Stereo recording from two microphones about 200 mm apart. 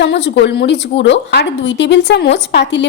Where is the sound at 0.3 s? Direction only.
60° left (ahead or behind).